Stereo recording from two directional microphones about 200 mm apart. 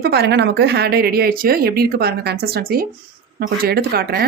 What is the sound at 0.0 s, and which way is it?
Speech, 55° right (ahead or behind).